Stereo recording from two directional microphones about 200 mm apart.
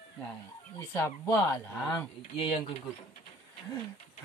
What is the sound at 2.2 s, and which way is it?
Speech, 25° left (ahead or behind).